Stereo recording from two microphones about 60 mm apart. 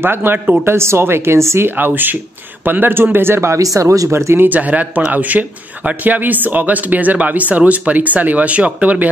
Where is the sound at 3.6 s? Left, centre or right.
Right.